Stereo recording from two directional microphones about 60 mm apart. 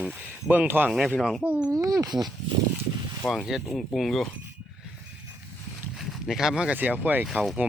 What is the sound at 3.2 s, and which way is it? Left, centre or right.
Speech, centre.